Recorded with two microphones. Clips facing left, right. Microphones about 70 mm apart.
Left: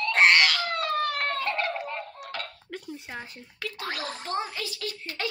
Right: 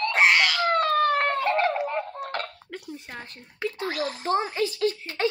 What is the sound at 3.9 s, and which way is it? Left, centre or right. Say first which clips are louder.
Speech: right 4 dB; left.